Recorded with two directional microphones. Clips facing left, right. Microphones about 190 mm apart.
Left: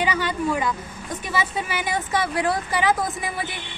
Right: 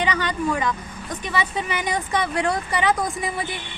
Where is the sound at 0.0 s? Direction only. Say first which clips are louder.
Even; 10° left (ahead or behind).